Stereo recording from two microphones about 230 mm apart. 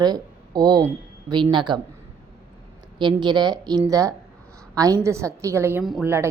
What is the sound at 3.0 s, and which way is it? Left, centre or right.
A woman's voice, centre.